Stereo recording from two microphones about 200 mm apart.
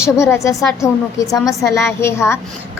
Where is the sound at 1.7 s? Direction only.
15° left (ahead or behind).